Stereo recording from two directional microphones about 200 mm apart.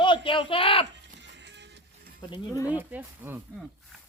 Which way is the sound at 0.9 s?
60° right (ahead or behind).